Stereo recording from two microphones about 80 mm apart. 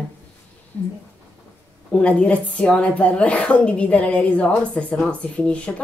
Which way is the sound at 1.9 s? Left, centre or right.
Centre.